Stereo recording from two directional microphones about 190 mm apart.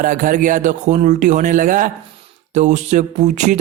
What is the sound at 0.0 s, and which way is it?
A man's voice, 45° right (ahead or behind).